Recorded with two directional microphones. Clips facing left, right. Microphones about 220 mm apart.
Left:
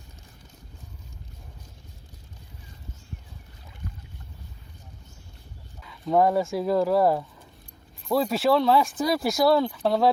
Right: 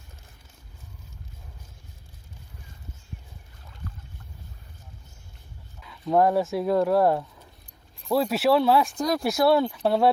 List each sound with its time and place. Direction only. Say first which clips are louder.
5.8 s speech: even; centre (ahead or behind)